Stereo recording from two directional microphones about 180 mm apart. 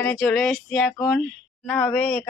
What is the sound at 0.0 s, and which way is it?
Speech, 5° left (ahead or behind).